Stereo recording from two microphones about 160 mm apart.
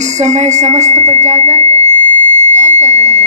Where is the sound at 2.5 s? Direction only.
45° right (ahead or behind).